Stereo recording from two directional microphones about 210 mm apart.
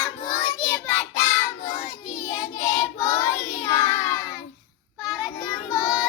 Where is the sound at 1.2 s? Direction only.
20° left (ahead or behind).